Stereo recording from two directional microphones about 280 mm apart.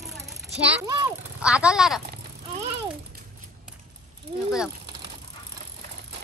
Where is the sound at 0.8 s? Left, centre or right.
Centre.